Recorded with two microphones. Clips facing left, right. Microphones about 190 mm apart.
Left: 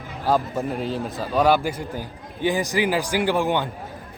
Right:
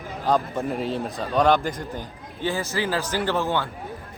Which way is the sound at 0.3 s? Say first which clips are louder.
Left 1 dB; centre (ahead or behind).